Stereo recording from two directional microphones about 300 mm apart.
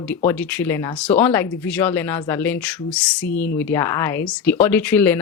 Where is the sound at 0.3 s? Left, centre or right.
Centre.